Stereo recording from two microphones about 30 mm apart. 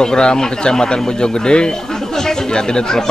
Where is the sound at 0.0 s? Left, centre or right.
Left.